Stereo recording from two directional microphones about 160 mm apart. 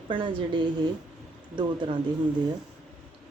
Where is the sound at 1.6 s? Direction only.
30° right (ahead or behind).